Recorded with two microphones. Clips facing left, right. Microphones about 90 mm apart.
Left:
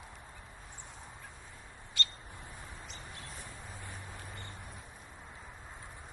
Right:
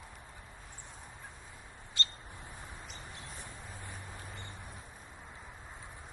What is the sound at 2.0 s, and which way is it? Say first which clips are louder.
Squawk: even; 30° right (ahead or behind).